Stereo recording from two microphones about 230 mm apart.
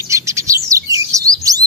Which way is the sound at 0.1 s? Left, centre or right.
Centre.